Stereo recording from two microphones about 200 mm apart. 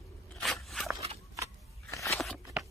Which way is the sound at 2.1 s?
Centre (ahead or behind).